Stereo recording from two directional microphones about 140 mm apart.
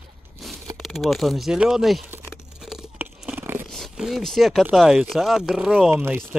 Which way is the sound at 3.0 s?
10° right (ahead or behind).